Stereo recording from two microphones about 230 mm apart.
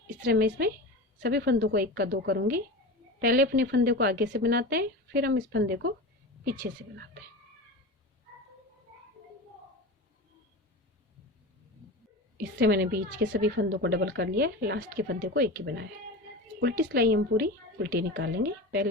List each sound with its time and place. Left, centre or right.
0.2 s a woman's voice: right
12.5 s a woman's voice: right